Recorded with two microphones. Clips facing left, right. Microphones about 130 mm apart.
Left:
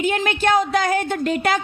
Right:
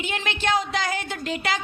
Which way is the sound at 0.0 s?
45° left (ahead or behind).